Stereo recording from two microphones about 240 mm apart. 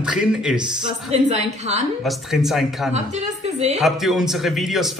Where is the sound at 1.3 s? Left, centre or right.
Right.